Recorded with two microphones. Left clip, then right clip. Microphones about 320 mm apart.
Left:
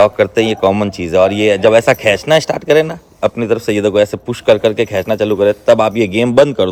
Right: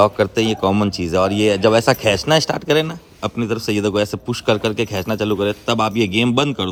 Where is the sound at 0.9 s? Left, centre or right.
Centre.